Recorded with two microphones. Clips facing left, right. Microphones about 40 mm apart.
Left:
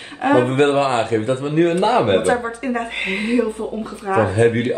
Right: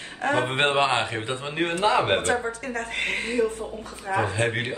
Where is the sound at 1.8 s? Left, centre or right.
Left.